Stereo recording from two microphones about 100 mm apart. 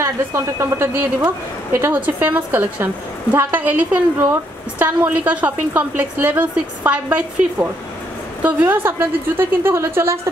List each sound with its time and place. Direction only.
0.0 s a woman's voice: 25° right (ahead or behind)